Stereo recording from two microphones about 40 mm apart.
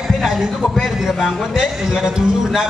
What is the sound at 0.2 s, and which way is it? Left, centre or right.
A man's voice, centre.